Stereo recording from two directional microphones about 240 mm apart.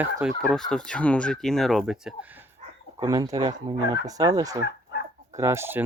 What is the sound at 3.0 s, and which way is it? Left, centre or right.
Speech, centre.